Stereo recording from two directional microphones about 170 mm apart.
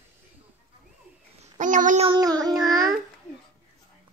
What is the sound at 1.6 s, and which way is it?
Child singing, 50° right (ahead or behind).